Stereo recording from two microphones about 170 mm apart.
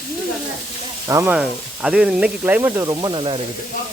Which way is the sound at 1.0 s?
15° right (ahead or behind).